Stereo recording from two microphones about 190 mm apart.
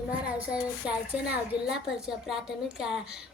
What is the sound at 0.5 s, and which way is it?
A woman's voice, 5° right (ahead or behind).